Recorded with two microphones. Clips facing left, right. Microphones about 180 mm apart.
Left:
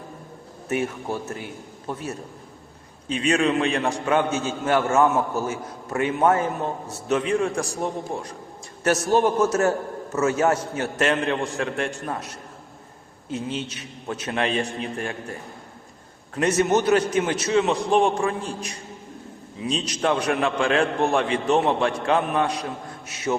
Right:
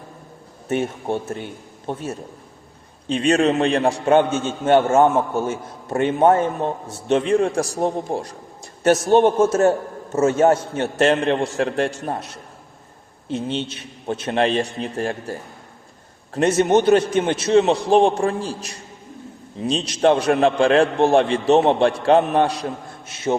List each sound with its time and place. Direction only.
0.7 s a man's voice: 30° right (ahead or behind)
3.1 s a man's voice: 35° right (ahead or behind)
13.3 s a man's voice: 30° right (ahead or behind)
19.6 s a man's voice: 30° right (ahead or behind)